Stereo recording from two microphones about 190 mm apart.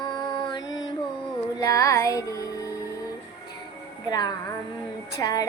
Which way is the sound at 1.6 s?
15° left (ahead or behind).